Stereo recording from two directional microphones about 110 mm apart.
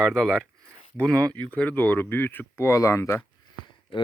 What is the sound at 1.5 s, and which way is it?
Speech, 10° left (ahead or behind).